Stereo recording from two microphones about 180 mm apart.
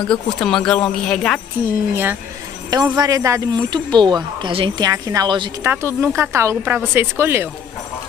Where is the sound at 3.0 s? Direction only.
20° right (ahead or behind).